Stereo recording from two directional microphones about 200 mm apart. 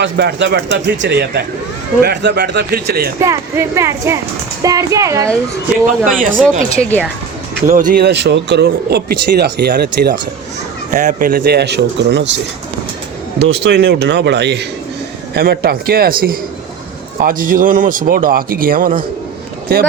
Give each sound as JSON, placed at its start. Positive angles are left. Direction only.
{"t": 0.0, "sound": "speech", "side_deg": -60}
{"t": 3.2, "sound": "speech", "side_deg": -15}
{"t": 6.0, "sound": "speech", "side_deg": 0}
{"t": 7.7, "sound": "speech", "side_deg": -45}
{"t": 10.9, "sound": "speech", "side_deg": -40}
{"t": 13.4, "sound": "speech", "side_deg": -60}